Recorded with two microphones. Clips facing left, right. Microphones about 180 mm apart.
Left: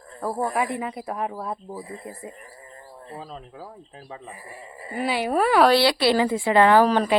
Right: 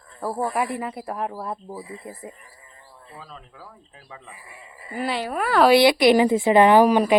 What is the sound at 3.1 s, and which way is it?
Speech, 35° left (ahead or behind).